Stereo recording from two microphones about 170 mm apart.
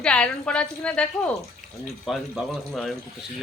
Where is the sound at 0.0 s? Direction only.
5° left (ahead or behind).